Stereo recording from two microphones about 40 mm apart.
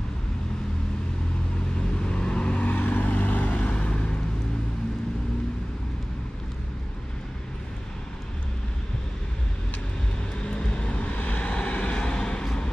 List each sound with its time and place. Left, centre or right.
2.0 s vehicle: left
2.6 s vehicle: left
3.5 s vehicle: left
10.4 s vehicle: left
11.1 s vehicle: left